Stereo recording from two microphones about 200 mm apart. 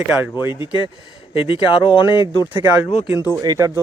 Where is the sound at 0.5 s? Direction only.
25° left (ahead or behind).